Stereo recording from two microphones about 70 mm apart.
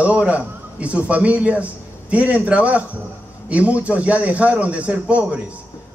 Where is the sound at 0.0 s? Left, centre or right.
Centre.